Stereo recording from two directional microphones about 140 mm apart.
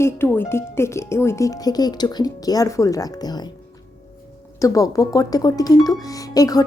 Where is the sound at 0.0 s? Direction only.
15° left (ahead or behind).